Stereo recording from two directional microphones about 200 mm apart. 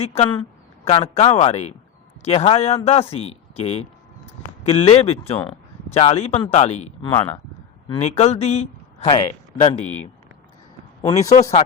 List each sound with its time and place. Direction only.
0.0 s speech: 30° left (ahead or behind)
11.0 s speech: 30° left (ahead or behind)